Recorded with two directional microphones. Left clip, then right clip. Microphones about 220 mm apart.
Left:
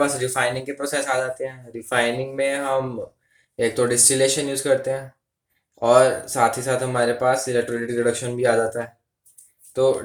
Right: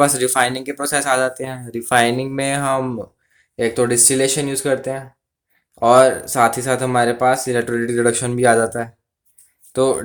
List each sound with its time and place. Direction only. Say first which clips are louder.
0.0 s speech: right 5 dB; 40° right (ahead or behind)